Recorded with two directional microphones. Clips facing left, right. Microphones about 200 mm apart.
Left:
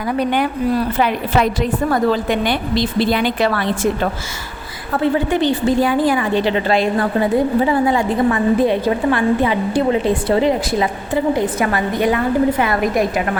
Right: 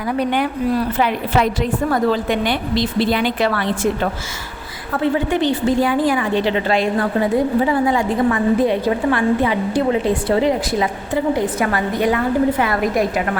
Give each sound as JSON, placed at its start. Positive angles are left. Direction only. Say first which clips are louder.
{"t": 0.9, "sound": "a woman's voice", "louder": "left 1 dB", "side_deg": 45}